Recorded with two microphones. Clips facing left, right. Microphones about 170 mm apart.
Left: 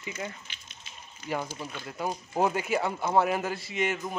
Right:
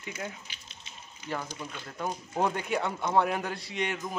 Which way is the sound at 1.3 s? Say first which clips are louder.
Left 3 dB; 10° left (ahead or behind).